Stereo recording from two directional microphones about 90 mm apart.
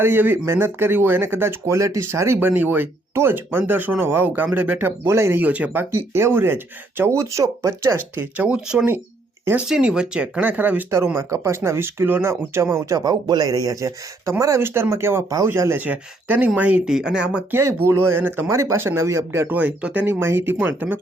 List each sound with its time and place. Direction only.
0.0 s speech: 25° right (ahead or behind)
5.4 s speech: 15° right (ahead or behind)
6.1 s speech: 25° right (ahead or behind)
15.8 s speech: 15° right (ahead or behind)
16.8 s speech: 5° right (ahead or behind)
17.5 s speech: 30° right (ahead or behind)
19.5 s speech: 20° right (ahead or behind)